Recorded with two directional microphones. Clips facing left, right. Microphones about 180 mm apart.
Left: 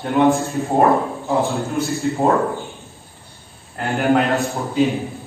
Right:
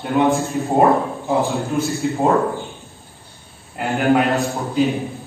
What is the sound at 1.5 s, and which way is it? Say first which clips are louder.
Speech: right 1 dB; centre (ahead or behind).